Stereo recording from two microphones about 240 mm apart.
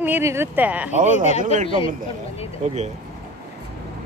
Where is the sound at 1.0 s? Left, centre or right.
Right.